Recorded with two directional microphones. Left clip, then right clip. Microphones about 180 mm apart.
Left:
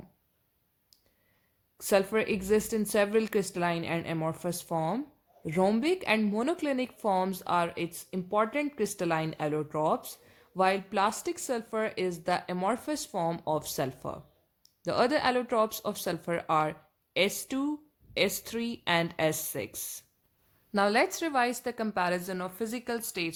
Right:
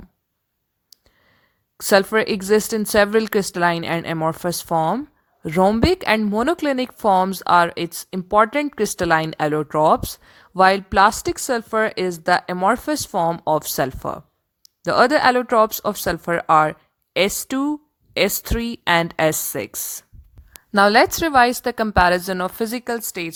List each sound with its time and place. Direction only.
1.8 s a woman's voice: 50° right (ahead or behind)